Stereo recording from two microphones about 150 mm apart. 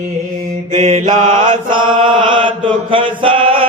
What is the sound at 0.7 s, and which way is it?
Mantra, 45° right (ahead or behind).